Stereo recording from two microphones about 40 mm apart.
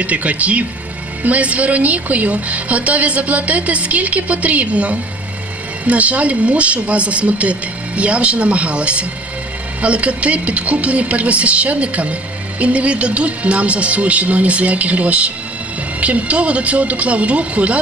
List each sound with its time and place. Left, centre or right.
0.0 s a woman's voice: right